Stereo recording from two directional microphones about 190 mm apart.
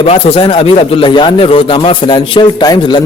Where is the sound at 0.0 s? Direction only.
30° left (ahead or behind).